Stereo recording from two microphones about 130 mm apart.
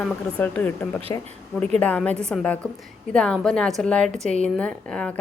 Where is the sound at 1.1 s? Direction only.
30° left (ahead or behind).